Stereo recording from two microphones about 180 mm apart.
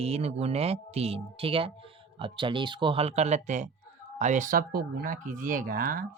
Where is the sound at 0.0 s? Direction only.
35° right (ahead or behind).